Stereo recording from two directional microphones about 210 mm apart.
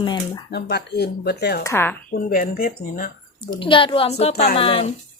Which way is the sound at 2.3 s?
45° left (ahead or behind).